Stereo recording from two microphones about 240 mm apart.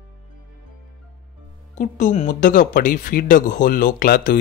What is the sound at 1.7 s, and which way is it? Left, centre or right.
Speech, left.